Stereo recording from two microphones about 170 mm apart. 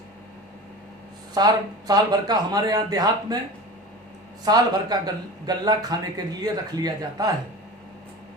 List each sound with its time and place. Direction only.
1.3 s speech: 25° right (ahead or behind)
4.4 s speech: 25° right (ahead or behind)